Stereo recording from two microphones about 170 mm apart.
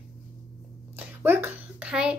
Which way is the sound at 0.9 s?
10° right (ahead or behind).